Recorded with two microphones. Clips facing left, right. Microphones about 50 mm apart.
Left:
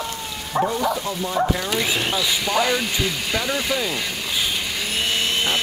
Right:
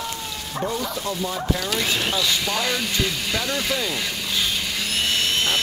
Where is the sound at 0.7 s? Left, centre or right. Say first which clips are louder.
Left 4 dB; centre.